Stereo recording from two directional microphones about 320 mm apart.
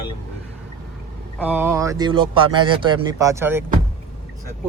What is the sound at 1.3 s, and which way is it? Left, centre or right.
Speech, centre.